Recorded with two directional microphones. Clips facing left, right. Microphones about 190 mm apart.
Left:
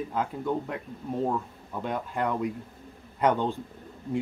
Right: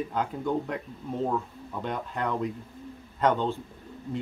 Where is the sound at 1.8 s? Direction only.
5° left (ahead or behind).